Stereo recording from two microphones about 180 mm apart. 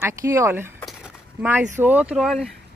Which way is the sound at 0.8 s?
5° right (ahead or behind).